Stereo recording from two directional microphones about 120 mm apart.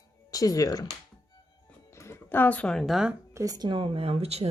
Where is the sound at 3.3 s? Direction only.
30° right (ahead or behind); by 4.4 s 60° right (ahead or behind).